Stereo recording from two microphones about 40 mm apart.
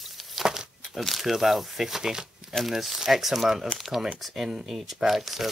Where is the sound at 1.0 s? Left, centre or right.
Centre.